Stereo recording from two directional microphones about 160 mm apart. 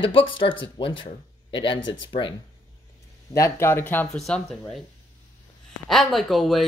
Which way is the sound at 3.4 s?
15° left (ahead or behind).